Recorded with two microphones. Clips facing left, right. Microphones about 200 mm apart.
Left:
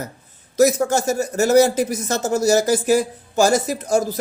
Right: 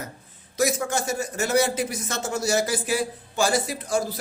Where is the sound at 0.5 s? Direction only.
40° left (ahead or behind).